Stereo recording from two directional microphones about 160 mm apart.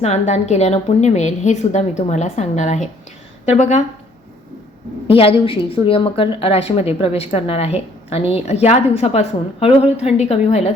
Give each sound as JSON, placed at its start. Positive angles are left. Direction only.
{"t": 0.0, "sound": "a woman's voice", "side_deg": 45}
{"t": 5.0, "sound": "a woman's voice", "side_deg": 35}